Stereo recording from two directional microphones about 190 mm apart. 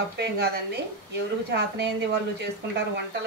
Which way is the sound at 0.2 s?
60° right (ahead or behind).